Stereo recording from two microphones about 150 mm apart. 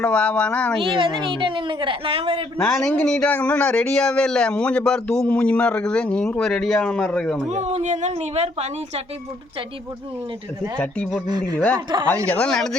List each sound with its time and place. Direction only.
0.0 s speech: 10° left (ahead or behind)
0.8 s a woman's voice: 35° right (ahead or behind)
2.6 s speech: 5° left (ahead or behind)
7.5 s speech: 50° right (ahead or behind)
10.8 s speech: 5° left (ahead or behind)
11.3 s speech: 25° right (ahead or behind)
11.5 s speech: 10° left (ahead or behind)